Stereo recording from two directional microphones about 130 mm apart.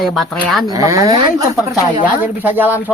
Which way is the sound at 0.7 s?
25° right (ahead or behind).